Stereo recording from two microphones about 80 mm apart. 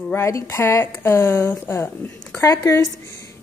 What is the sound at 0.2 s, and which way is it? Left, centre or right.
A woman's voice, left.